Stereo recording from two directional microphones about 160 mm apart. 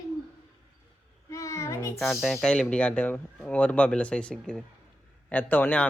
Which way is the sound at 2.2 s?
Centre (ahead or behind).